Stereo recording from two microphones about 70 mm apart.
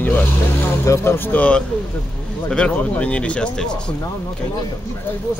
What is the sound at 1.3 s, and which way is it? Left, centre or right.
Speech, centre.